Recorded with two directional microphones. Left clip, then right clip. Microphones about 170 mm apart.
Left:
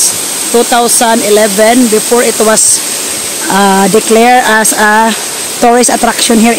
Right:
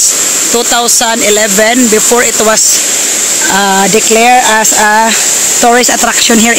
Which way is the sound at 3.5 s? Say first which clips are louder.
Left 2 dB; 15° left (ahead or behind).